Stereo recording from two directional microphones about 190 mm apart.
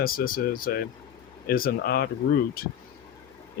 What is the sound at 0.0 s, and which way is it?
Speech, 50° left (ahead or behind).